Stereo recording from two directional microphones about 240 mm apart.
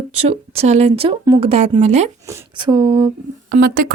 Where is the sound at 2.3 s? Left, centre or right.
Centre.